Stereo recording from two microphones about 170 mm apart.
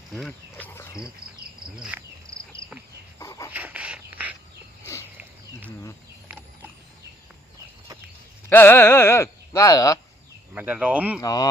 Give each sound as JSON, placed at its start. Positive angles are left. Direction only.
{"t": 0.1, "sound": "cricket", "side_deg": 5}
{"t": 1.2, "sound": "cricket", "side_deg": -65}
{"t": 1.7, "sound": "cricket", "side_deg": -5}
{"t": 2.3, "sound": "cricket", "side_deg": 5}
{"t": 3.2, "sound": "a sound", "side_deg": 20}
{"t": 3.5, "sound": "a sound", "side_deg": -10}
{"t": 8.4, "sound": "speech", "side_deg": 15}
{"t": 10.5, "sound": "speech", "side_deg": -10}
{"t": 11.2, "sound": "speech", "side_deg": 20}